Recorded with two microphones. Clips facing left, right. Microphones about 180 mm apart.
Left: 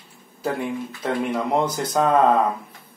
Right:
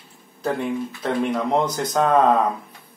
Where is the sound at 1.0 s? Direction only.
5° left (ahead or behind).